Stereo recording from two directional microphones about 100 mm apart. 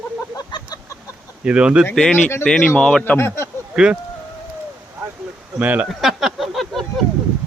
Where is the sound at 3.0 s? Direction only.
25° left (ahead or behind).